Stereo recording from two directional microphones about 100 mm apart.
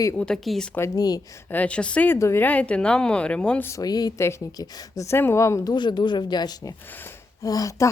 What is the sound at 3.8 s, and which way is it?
Speech, 40° left (ahead or behind).